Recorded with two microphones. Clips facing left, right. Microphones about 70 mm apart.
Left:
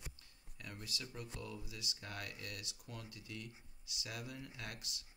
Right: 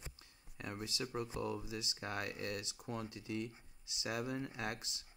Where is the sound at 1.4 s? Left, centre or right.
Right.